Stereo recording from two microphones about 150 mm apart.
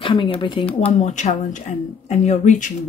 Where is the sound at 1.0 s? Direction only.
50° left (ahead or behind).